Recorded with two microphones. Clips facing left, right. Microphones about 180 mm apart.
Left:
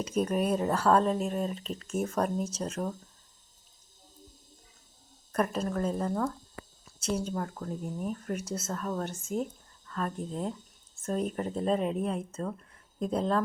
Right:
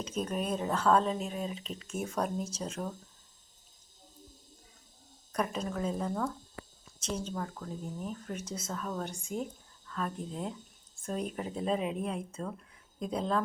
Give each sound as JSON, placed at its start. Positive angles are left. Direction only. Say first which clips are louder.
{"t": 0.0, "sound": "speech", "louder": "left 6 dB", "side_deg": 10}
{"t": 5.3, "sound": "speech", "louder": "left 4 dB", "side_deg": 5}
{"t": 10.2, "sound": "speech", "louder": "left 3 dB", "side_deg": 45}
{"t": 11.0, "sound": "speech", "louder": "left 4 dB", "side_deg": 0}